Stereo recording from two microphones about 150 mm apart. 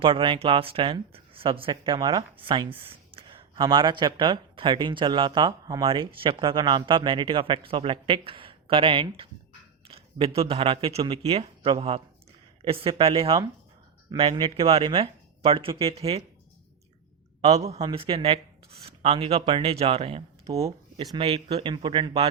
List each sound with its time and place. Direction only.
0.0 s a man's voice: 35° right (ahead or behind)
17.4 s speech: 45° right (ahead or behind)